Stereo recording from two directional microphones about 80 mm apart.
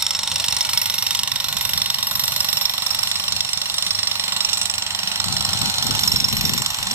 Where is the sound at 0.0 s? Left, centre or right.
Centre.